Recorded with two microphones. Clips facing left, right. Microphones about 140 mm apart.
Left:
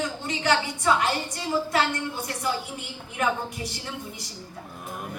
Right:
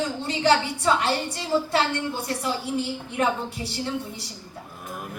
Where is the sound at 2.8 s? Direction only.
30° right (ahead or behind).